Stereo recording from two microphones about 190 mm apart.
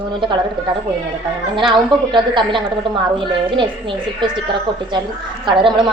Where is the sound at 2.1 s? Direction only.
25° right (ahead or behind).